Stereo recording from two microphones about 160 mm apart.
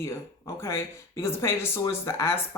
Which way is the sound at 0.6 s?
15° left (ahead or behind).